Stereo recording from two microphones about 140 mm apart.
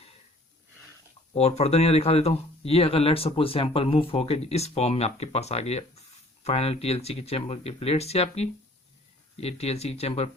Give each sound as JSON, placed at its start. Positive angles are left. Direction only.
{"t": 1.3, "sound": "speech", "side_deg": 50}